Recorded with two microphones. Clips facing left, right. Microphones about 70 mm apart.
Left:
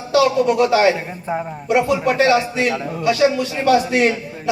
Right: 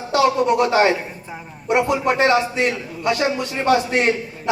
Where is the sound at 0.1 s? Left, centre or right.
Right.